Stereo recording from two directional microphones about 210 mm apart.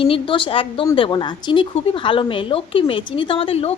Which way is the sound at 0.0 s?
25° left (ahead or behind).